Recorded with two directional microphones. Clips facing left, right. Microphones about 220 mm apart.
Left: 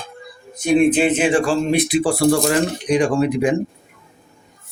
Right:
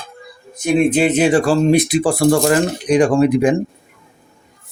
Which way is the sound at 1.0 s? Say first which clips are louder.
Right 3 dB; 40° right (ahead or behind).